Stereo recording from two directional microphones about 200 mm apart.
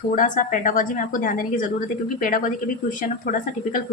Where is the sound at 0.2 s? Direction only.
40° left (ahead or behind).